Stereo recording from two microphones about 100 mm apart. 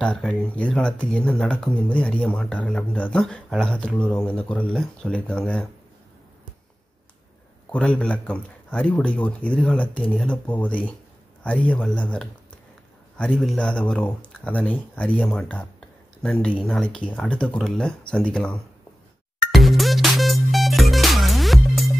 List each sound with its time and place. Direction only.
0.0 s speech: 10° left (ahead or behind)
7.7 s speech: 10° left (ahead or behind)
13.6 s speech: 10° left (ahead or behind)
19.5 s music: centre (ahead or behind)